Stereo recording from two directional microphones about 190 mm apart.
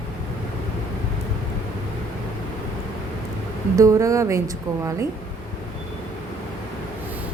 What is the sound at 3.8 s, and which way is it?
Speech, 15° right (ahead or behind).